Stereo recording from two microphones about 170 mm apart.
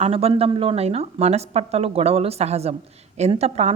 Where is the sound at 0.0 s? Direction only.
35° right (ahead or behind).